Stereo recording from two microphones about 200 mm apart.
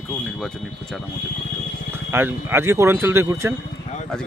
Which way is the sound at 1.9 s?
10° right (ahead or behind).